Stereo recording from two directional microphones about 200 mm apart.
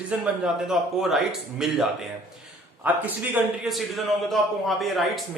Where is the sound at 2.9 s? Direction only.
10° right (ahead or behind).